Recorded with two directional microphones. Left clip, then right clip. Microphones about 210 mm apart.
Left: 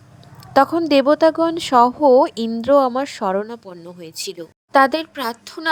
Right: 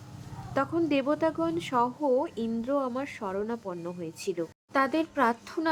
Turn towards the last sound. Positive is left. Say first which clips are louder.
# left 4 dB
turn(degrees=40)  # may be behind; listen again after turning